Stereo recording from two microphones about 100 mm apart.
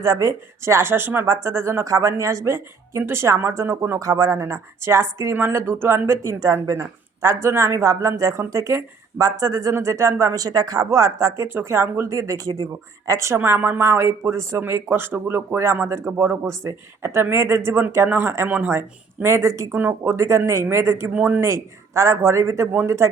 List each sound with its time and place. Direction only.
0.0 s speech: 35° right (ahead or behind)
19.7 s speech: 20° right (ahead or behind)
21.4 s speech: 30° right (ahead or behind)